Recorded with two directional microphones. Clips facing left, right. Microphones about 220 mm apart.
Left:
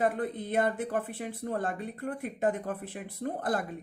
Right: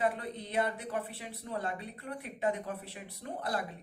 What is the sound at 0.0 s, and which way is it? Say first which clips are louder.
A woman's voice: left 4 dB; 50° left (ahead or behind).